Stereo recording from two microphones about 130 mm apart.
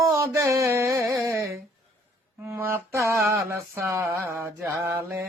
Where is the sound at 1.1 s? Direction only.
25° right (ahead or behind).